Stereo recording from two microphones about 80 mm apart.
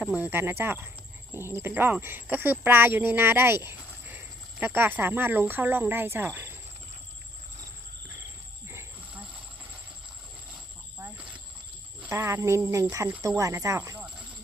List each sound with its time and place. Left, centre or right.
0.0 s speech: centre
8.6 s cricket: right
11.0 s a sound: centre
12.1 s speech: right